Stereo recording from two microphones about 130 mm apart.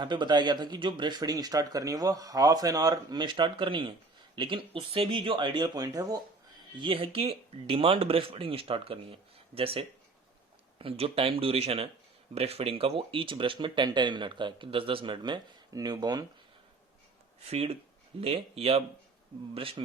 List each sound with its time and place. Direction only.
0.0 s speech: 35° right (ahead or behind)
6.7 s speech: 40° right (ahead or behind)
17.5 s speech: 50° right (ahead or behind)